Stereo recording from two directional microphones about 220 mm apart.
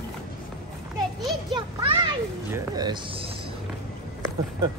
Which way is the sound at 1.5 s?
20° right (ahead or behind).